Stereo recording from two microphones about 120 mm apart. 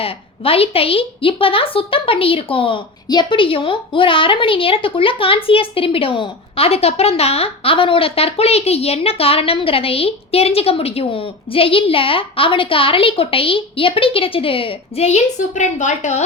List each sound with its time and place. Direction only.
0.0 s a woman's voice: 50° left (ahead or behind); by 16.2 s 85° left